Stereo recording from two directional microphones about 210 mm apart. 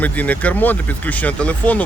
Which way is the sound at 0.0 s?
5° left (ahead or behind).